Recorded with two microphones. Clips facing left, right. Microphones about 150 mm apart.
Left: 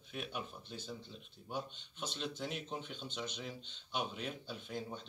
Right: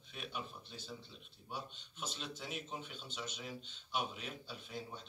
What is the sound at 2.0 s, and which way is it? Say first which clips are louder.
Speech: left 4 dB; centre (ahead or behind).